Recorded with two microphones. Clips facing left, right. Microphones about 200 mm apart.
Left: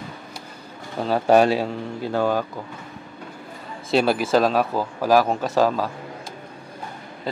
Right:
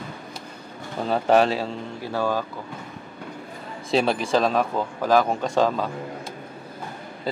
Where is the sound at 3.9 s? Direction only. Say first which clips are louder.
Left 2 dB; 5° left (ahead or behind).